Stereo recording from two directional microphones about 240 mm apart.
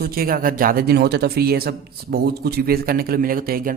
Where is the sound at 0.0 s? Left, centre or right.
Right.